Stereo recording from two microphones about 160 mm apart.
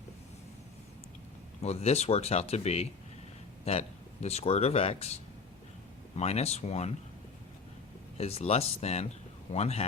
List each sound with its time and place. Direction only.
1.6 s speech: 40° left (ahead or behind)
8.2 s speech: 40° left (ahead or behind)